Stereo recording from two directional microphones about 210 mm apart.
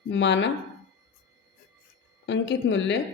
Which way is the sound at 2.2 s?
60° left (ahead or behind).